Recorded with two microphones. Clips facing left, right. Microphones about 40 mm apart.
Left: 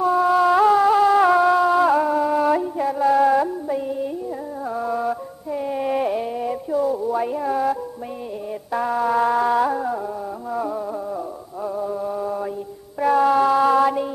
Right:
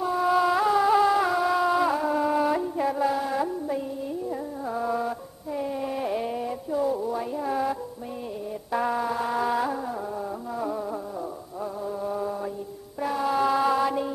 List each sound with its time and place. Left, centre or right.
0.0 s a sound: centre
1.5 s music: centre
5.7 s music: left
6.0 s music: centre
8.7 s music: centre
11.8 s mantra: centre
13.0 s music: centre